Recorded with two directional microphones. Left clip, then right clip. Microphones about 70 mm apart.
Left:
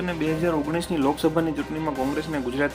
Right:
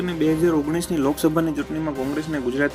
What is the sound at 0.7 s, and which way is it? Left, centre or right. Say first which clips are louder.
Speech: right 1 dB; right.